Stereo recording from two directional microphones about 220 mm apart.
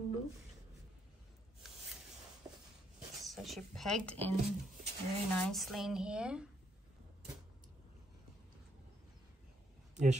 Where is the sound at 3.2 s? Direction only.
Centre (ahead or behind).